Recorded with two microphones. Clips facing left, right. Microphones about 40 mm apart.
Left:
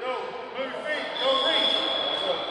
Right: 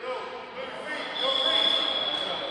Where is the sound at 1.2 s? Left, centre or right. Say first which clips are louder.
Left 2 dB; left.